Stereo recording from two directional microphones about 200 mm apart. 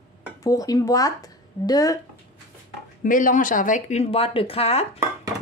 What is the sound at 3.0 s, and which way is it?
Speech, 40° left (ahead or behind).